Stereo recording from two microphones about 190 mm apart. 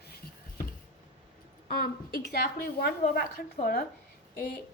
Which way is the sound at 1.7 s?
55° left (ahead or behind).